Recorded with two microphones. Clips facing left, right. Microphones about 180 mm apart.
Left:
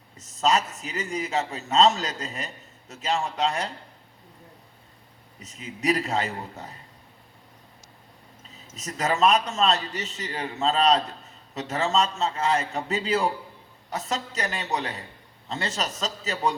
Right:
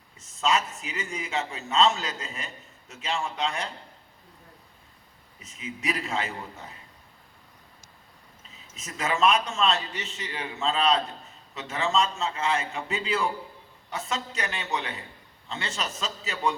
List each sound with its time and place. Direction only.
0.2 s a man's voice: 40° left (ahead or behind)
5.4 s a man's voice: 40° left (ahead or behind)
8.4 s a man's voice: 40° left (ahead or behind)